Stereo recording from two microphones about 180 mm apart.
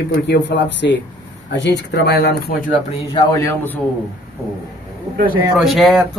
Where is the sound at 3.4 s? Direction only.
15° left (ahead or behind).